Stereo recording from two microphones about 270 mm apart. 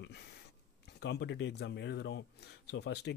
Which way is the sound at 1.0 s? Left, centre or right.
Left.